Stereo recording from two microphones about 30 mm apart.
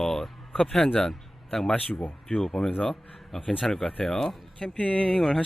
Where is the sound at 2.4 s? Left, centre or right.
Centre.